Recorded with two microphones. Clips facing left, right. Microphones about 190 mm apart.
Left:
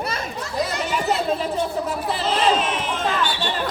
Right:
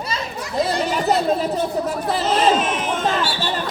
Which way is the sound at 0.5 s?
30° right (ahead or behind).